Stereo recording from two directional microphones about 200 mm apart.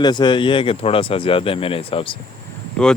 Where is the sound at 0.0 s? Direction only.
20° left (ahead or behind).